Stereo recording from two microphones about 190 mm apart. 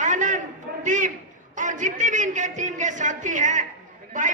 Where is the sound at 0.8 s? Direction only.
40° right (ahead or behind).